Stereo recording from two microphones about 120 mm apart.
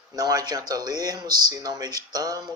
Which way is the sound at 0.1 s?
30° right (ahead or behind).